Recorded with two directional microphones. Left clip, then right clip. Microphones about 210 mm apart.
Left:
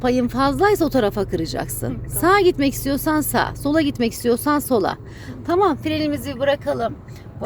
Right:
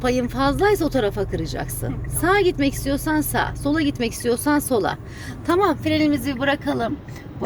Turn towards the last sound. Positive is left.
turn(degrees=5)  # may be behind; listen again after turning